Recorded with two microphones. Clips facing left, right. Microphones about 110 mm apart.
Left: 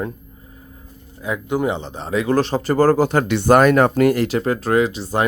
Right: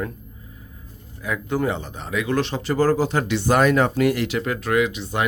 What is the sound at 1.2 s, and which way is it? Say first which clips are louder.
Speech: left 3 dB; 20° left (ahead or behind).